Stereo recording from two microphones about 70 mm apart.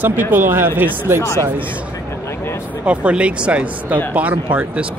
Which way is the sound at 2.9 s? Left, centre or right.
Centre.